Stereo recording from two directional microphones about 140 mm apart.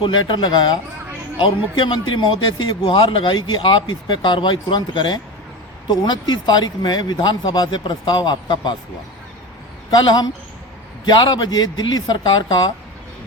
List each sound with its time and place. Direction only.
0.0 s a man's voice: 35° left (ahead or behind)
9.9 s a man's voice: 30° left (ahead or behind)